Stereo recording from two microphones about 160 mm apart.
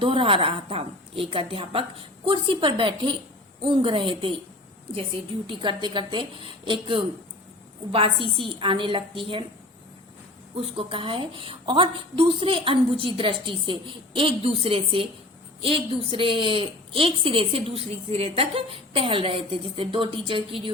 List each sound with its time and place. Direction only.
0.0 s a woman's voice: 35° right (ahead or behind)
5.5 s a woman's voice: 30° right (ahead or behind)
10.5 s a woman's voice: 35° right (ahead or behind)